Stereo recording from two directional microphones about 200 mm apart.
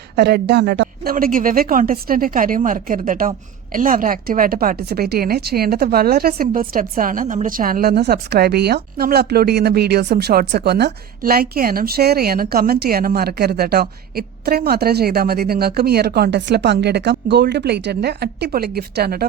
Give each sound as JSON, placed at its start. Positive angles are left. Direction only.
{"t": 0.2, "sound": "speech", "side_deg": -55}